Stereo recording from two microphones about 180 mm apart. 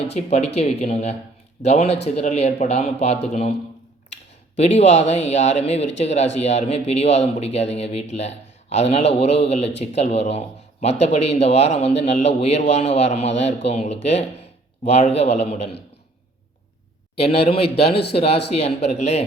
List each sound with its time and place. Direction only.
0.1 s a man's voice: 35° left (ahead or behind)
4.5 s a man's voice: 35° left (ahead or behind)
17.2 s a man's voice: 35° left (ahead or behind)